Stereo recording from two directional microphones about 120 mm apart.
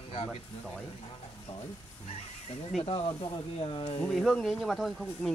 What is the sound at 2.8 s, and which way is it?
Speech, 45° left (ahead or behind).